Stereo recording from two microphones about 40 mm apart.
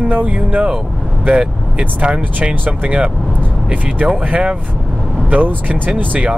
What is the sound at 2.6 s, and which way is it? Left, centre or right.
Speech, right.